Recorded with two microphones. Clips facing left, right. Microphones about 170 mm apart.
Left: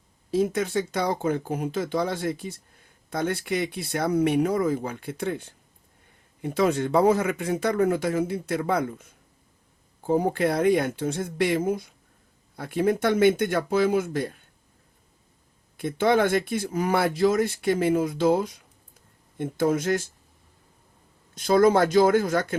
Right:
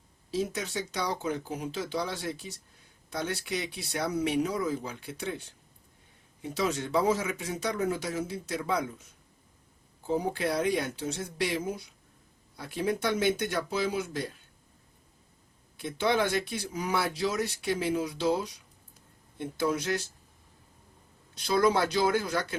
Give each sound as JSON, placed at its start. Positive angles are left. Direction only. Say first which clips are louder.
{"t": 0.3, "sound": "speech", "louder": "left 8 dB", "side_deg": 55}
{"t": 15.8, "sound": "speech", "louder": "left 6 dB", "side_deg": 50}
{"t": 21.3, "sound": "speech", "louder": "left 7 dB", "side_deg": 50}